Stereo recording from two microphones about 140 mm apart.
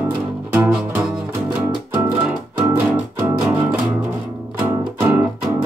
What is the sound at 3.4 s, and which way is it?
Music, 10° right (ahead or behind).